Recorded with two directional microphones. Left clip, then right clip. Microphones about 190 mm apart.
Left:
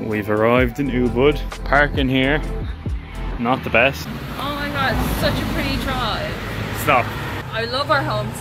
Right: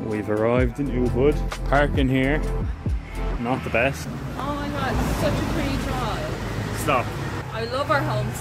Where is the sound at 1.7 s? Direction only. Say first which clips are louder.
Left 4 dB; 15° right (ahead or behind).